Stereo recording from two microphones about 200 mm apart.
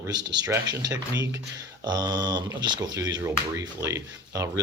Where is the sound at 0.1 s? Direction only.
20° right (ahead or behind).